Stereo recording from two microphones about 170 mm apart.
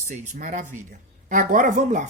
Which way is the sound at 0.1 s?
50° right (ahead or behind).